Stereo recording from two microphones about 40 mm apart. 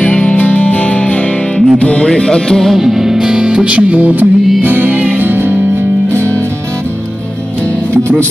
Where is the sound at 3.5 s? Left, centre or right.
Right.